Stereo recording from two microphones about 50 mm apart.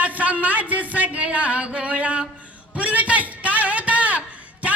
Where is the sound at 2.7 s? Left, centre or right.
Right.